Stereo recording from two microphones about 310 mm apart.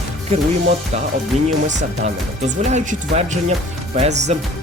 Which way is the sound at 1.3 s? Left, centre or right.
Right.